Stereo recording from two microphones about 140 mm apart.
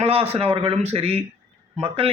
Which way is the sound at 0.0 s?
45° right (ahead or behind).